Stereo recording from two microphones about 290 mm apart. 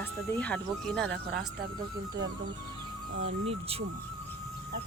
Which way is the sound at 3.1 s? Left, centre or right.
Right.